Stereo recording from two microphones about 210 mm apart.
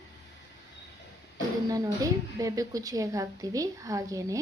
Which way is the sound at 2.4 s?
15° right (ahead or behind).